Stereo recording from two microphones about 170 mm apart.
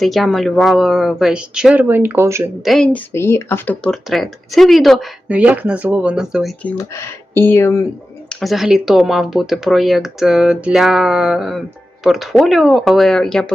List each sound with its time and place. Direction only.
0.0 s speech: centre (ahead or behind)
2.6 s speech: 5° left (ahead or behind)
3.1 s speech: 15° left (ahead or behind)
8.3 s speech: centre (ahead or behind)